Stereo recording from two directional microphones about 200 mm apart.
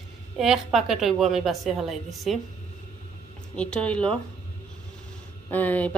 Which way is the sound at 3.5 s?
5° left (ahead or behind).